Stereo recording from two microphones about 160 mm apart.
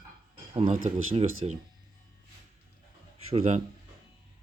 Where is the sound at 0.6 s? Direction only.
55° right (ahead or behind).